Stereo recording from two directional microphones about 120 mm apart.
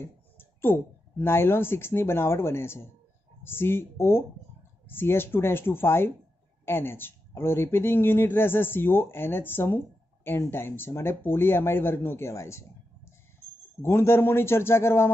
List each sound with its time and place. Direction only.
0.0 s speech: 20° left (ahead or behind)